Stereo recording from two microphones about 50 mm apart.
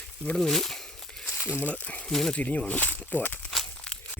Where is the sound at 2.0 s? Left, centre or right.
Centre.